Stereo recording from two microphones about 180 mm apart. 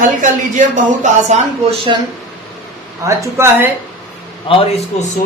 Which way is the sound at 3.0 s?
15° right (ahead or behind).